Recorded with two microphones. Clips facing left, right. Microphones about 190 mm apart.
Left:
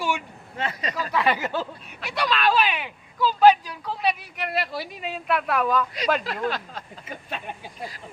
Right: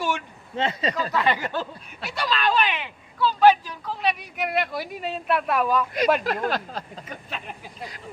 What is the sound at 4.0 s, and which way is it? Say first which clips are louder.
Speech: right 1 dB; centre (ahead or behind).